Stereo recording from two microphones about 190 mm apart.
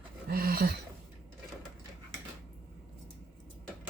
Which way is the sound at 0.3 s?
50° right (ahead or behind).